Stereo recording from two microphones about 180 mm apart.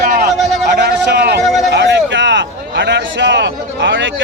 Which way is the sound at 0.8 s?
65° right (ahead or behind).